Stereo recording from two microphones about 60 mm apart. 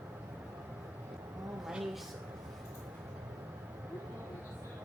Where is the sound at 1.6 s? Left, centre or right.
Centre.